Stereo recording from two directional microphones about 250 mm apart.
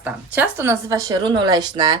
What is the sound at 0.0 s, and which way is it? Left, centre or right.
A woman's voice, centre.